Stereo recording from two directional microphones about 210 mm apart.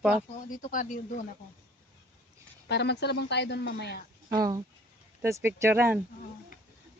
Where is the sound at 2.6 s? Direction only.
55° left (ahead or behind).